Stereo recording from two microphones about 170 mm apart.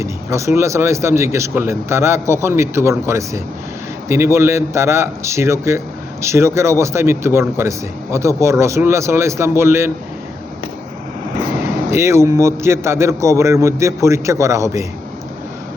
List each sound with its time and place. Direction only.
0.0 s a man's voice: 15° right (ahead or behind)
11.9 s a man's voice: 15° right (ahead or behind)